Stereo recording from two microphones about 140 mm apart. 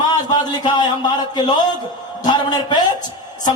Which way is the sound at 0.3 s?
30° left (ahead or behind).